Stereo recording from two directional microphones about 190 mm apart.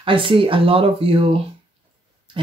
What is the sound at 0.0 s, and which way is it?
Speech, 25° right (ahead or behind).